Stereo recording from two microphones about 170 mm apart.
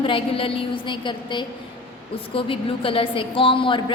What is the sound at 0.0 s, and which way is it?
A woman's voice, 30° left (ahead or behind).